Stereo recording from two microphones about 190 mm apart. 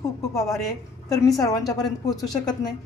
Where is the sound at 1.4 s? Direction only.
20° left (ahead or behind).